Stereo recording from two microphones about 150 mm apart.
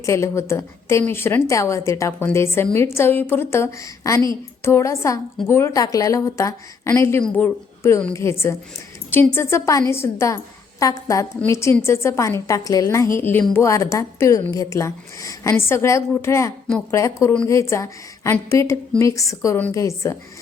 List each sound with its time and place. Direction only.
0.0 s a woman's voice: 20° left (ahead or behind)